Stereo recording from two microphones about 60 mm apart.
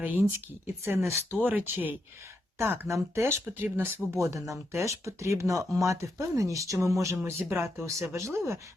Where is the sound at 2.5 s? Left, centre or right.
Right.